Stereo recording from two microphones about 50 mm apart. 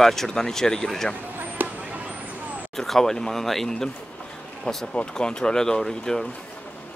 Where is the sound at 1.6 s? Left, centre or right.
Right.